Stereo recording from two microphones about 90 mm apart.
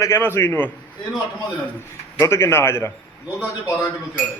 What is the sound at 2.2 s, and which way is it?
Speech, 30° left (ahead or behind).